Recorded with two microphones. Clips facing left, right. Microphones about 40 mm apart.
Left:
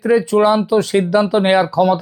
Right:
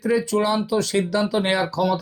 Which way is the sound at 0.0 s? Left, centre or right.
Left.